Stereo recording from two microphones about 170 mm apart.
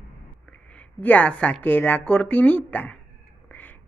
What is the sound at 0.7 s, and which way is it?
A woman's voice, 10° left (ahead or behind).